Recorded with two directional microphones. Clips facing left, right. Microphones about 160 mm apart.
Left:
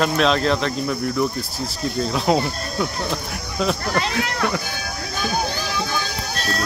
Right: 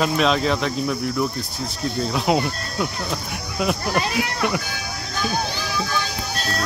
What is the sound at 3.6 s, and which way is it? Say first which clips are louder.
Speech: even; 10° right (ahead or behind).